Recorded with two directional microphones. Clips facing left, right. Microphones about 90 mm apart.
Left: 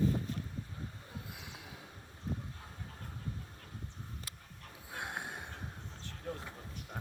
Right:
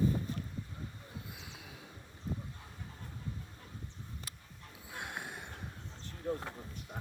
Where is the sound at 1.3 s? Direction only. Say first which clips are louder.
Left 1 dB; 55° left (ahead or behind).